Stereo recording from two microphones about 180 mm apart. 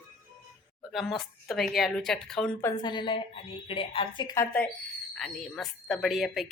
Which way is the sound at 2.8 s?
25° left (ahead or behind).